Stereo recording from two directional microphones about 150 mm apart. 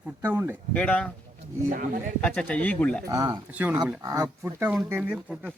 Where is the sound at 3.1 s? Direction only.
25° right (ahead or behind).